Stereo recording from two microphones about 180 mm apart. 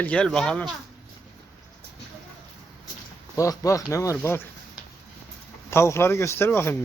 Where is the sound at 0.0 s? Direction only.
5° left (ahead or behind).